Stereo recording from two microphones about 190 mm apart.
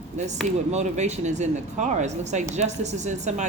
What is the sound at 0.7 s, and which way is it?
Speech, 35° right (ahead or behind).